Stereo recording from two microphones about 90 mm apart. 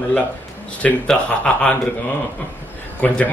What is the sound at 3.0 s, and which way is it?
Speech, 10° left (ahead or behind).